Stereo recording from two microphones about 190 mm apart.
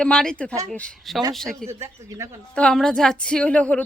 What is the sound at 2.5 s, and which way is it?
Speech, 5° left (ahead or behind).